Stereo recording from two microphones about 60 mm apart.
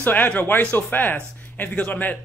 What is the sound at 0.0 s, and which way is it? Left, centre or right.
A man's voice, left.